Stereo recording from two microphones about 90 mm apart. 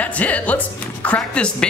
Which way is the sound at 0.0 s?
15° left (ahead or behind).